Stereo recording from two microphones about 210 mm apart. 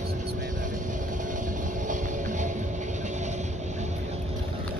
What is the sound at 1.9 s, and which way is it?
Music, 35° right (ahead or behind).